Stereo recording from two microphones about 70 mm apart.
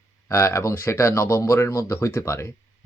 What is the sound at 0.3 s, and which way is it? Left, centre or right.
Speech, left.